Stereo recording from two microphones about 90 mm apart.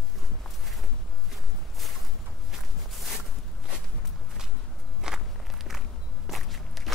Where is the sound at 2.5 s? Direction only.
5° right (ahead or behind).